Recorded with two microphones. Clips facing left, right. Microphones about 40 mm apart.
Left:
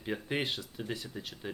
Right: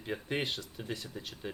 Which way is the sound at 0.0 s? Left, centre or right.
Centre.